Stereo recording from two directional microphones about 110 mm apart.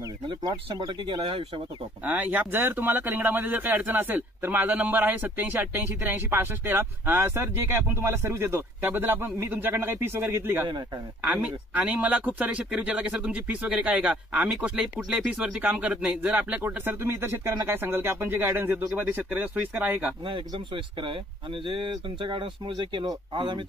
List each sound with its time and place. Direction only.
0.3 s speech: 40° right (ahead or behind)
2.0 s speech: 15° right (ahead or behind)
20.2 s speech: 50° right (ahead or behind)